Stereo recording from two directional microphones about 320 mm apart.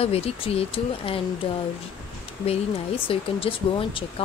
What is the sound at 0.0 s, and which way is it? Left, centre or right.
Speech, centre.